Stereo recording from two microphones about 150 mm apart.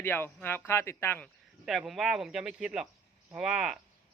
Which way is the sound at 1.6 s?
Centre (ahead or behind).